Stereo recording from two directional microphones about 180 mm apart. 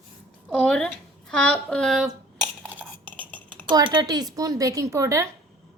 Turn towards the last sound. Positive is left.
turn(degrees=-15)  # may be behind; listen again after turning